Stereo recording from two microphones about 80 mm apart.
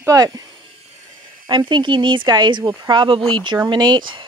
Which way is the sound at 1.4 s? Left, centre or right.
Right.